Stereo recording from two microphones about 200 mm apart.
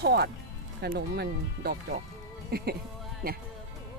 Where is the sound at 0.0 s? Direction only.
55° right (ahead or behind).